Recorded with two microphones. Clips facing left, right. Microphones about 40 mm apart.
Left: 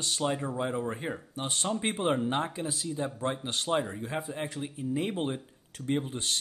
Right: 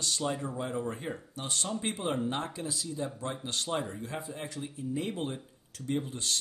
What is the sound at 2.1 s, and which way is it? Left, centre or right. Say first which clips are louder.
Speech: left 4 dB; left.